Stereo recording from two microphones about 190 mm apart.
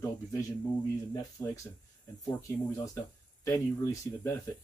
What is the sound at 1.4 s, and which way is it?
Speech, 10° left (ahead or behind).